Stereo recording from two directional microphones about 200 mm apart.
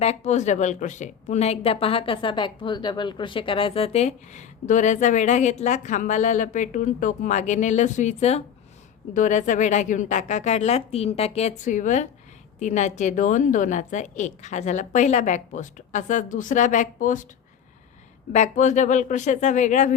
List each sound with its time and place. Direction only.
0.0 s speech: 35° left (ahead or behind)
18.3 s speech: 35° left (ahead or behind)